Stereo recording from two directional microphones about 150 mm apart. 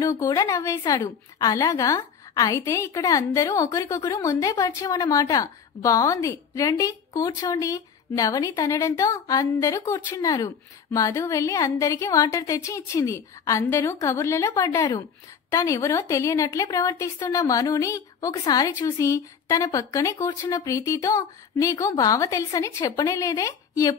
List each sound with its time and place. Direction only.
0.0 s a woman's voice: 25° left (ahead or behind)